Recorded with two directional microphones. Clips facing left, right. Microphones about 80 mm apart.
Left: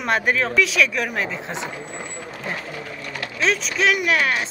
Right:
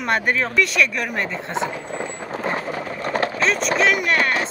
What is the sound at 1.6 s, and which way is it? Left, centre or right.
Ratchet, right.